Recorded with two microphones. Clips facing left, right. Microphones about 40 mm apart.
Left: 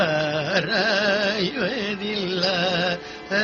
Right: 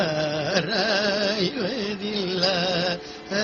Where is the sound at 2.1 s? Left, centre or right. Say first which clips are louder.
Even; centre.